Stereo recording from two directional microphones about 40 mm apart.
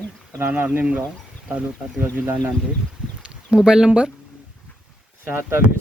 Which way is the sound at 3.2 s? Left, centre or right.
Centre.